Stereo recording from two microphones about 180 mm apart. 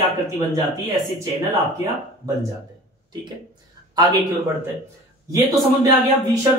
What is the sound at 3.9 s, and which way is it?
Speech, 20° right (ahead or behind).